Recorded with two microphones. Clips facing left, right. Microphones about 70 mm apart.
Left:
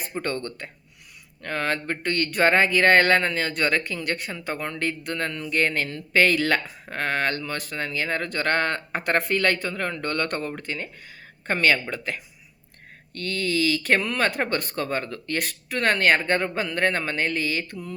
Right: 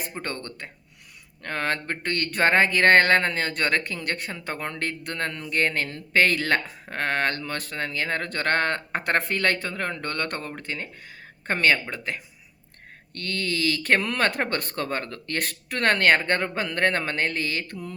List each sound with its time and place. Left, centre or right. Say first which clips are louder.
0.2 s speech: left 8 dB; right
13.1 s speech: left 3 dB; right